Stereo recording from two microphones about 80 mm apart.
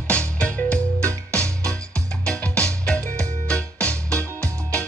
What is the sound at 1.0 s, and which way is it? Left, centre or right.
Music, right.